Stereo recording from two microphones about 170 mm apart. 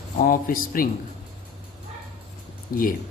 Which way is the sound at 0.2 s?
55° left (ahead or behind).